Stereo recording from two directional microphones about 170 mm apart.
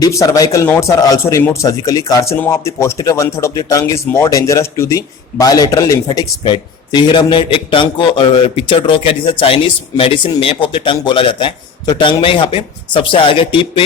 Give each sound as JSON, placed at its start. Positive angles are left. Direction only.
{"t": 0.0, "sound": "speech", "side_deg": 20}